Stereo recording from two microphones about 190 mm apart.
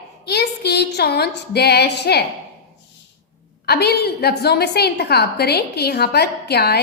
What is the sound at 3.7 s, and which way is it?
A woman's voice, 60° left (ahead or behind).